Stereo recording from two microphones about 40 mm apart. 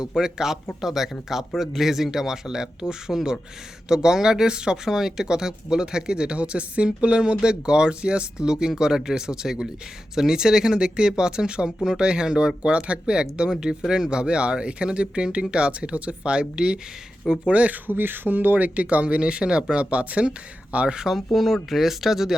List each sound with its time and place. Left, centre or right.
0.2 s speech: centre
3.1 s speech: centre
3.8 s speech: centre
17.4 s speech: right
17.8 s speech: right
21.0 s speech: centre